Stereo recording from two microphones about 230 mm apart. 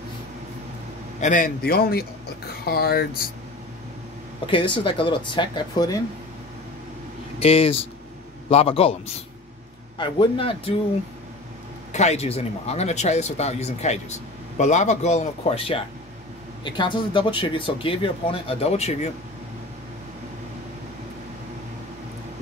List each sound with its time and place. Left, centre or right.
1.2 s a man's voice: left
4.5 s speech: left
7.3 s speech: left
9.9 s speech: left
11.9 s speech: left